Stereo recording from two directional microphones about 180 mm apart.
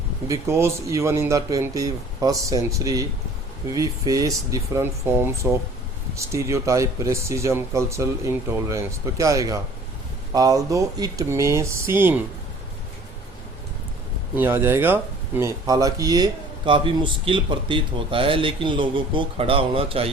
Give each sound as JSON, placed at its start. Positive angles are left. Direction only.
{"t": 0.3, "sound": "speech", "side_deg": -15}
{"t": 14.3, "sound": "speech", "side_deg": -10}